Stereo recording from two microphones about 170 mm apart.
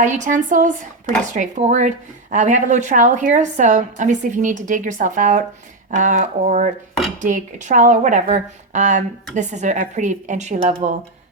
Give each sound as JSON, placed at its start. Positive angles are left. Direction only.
{"t": 0.0, "sound": "speech", "side_deg": -50}